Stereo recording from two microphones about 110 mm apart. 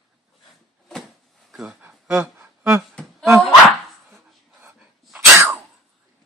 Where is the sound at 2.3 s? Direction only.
20° right (ahead or behind).